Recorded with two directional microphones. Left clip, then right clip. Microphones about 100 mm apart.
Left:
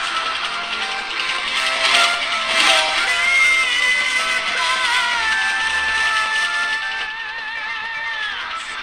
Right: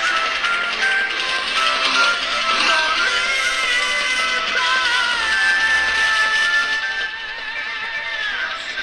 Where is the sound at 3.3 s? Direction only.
50° left (ahead or behind); by 5.0 s 65° left (ahead or behind).